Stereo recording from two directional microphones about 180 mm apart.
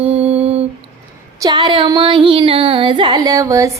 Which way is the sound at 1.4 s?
25° right (ahead or behind).